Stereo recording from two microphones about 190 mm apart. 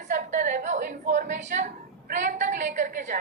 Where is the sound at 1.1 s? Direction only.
40° right (ahead or behind).